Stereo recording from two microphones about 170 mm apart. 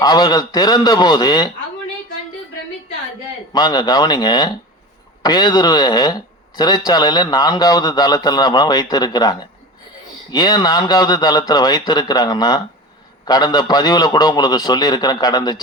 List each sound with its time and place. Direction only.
0.0 s speech: 25° left (ahead or behind)
3.5 s speech: 25° left (ahead or behind)
10.3 s speech: 25° left (ahead or behind)